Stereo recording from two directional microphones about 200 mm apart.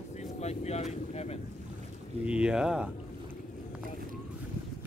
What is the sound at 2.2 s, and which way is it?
Speech, 5° right (ahead or behind).